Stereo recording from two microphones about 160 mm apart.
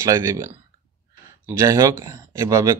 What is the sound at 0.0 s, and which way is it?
Speech, 20° right (ahead or behind).